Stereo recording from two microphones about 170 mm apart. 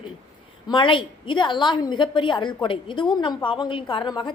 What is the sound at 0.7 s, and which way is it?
A woman's voice, 30° left (ahead or behind).